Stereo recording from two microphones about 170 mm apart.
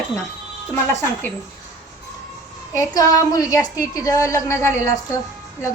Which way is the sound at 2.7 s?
20° left (ahead or behind).